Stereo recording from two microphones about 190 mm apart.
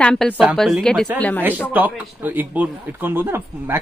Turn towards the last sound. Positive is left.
turn(degrees=-10)  # may be behind; listen again after turning